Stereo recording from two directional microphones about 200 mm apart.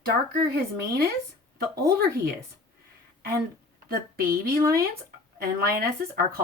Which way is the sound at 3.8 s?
45° right (ahead or behind).